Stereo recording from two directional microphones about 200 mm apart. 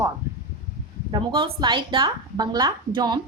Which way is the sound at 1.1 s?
25° right (ahead or behind).